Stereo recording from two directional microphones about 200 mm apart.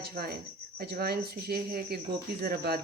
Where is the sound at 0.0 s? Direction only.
50° right (ahead or behind).